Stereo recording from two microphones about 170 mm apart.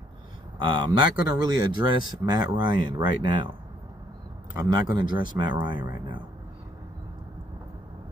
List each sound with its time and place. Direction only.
0.6 s speech: 25° right (ahead or behind)
4.6 s speech: 25° right (ahead or behind)